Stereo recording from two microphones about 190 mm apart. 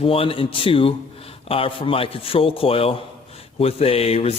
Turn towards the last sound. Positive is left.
turn(degrees=30)  # may be behind; listen again after turning